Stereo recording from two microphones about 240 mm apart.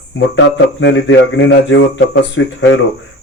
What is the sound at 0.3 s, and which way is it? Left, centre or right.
Speech, left.